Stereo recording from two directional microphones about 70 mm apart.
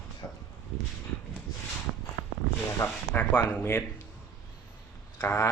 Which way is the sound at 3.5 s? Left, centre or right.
Left.